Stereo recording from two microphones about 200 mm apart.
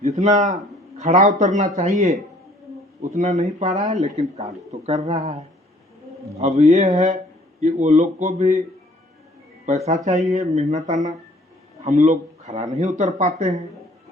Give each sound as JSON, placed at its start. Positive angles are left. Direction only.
{"t": 0.0, "sound": "a man's voice", "side_deg": -35}
{"t": 3.0, "sound": "speech", "side_deg": -35}
{"t": 9.6, "sound": "speech", "side_deg": -35}